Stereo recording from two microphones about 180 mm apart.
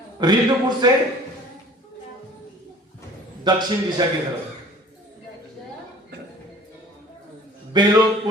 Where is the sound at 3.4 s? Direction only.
25° right (ahead or behind).